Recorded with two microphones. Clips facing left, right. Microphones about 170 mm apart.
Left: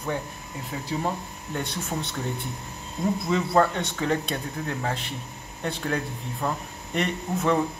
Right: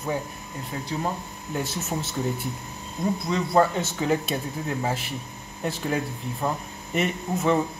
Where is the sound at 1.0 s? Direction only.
5° right (ahead or behind).